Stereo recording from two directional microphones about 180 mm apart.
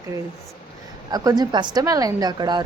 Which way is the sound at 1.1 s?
20° right (ahead or behind).